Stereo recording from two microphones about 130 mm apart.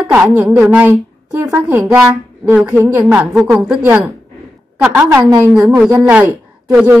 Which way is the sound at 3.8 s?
15° right (ahead or behind).